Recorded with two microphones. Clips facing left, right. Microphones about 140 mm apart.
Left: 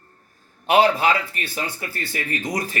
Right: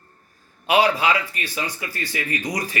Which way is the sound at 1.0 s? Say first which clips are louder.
Left 1 dB; 50° left (ahead or behind).